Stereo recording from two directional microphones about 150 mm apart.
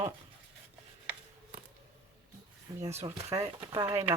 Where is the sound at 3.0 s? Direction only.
40° right (ahead or behind).